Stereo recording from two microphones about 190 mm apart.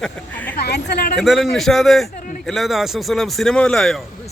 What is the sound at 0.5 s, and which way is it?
Speech, 60° left (ahead or behind).